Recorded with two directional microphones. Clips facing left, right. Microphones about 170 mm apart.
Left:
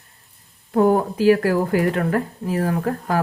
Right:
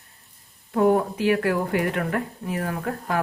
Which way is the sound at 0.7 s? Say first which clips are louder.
Left 3 dB; 35° left (ahead or behind).